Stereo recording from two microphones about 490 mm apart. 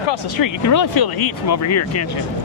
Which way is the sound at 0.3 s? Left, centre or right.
Left.